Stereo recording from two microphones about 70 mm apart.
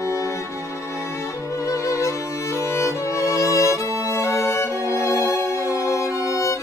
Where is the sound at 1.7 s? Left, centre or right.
Left.